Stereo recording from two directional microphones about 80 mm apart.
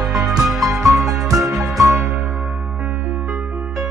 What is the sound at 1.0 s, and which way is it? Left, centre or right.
Music, right.